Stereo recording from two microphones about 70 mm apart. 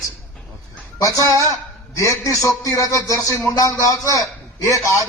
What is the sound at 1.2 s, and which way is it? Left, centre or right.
Music, left.